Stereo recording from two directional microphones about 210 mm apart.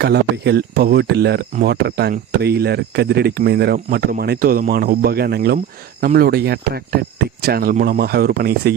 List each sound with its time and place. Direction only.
0.0 s speech: 50° right (ahead or behind)